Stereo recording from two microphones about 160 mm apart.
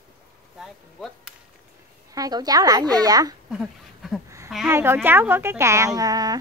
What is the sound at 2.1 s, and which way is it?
A woman's voice, 25° right (ahead or behind).